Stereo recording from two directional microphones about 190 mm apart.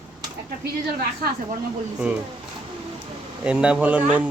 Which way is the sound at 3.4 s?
5° right (ahead or behind).